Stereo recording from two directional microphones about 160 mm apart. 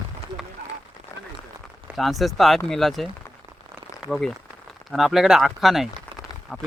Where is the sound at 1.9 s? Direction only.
Centre (ahead or behind).